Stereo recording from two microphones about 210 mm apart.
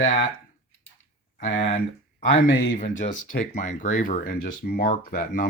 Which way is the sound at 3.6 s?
35° left (ahead or behind).